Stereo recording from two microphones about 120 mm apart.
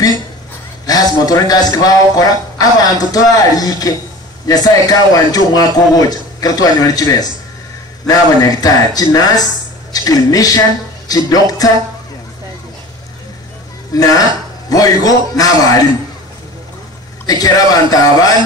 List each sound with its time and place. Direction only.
0.8 s speech: 30° left (ahead or behind)
11.1 s music: 30° left (ahead or behind)
13.9 s music: 30° left (ahead or behind)
14.7 s speech: 30° left (ahead or behind)
17.3 s speech: 30° left (ahead or behind)